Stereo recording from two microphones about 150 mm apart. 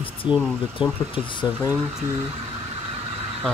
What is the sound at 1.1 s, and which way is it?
Speech, 30° left (ahead or behind).